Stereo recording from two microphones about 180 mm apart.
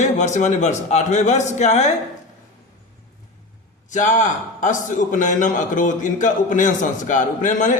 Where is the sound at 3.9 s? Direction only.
40° left (ahead or behind).